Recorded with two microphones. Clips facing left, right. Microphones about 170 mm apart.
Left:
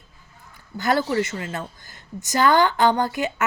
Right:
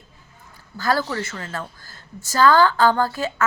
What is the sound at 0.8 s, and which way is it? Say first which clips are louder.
A woman's voice: left 2 dB; 20° left (ahead or behind).